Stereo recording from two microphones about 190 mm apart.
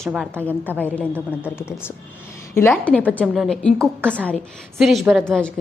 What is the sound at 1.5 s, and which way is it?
A woman's voice, 10° left (ahead or behind).